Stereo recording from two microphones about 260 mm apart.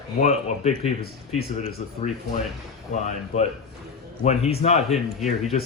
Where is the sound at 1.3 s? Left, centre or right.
Left.